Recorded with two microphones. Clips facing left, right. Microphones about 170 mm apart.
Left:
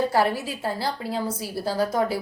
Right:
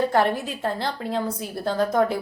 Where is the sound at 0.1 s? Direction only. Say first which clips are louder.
Right 1 dB; 5° left (ahead or behind).